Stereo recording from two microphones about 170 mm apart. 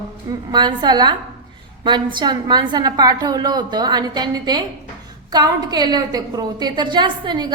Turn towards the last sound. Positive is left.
turn(degrees=-25)  # may be behind; listen again after turning